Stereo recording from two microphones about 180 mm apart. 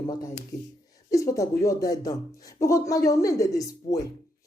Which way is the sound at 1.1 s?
20° left (ahead or behind).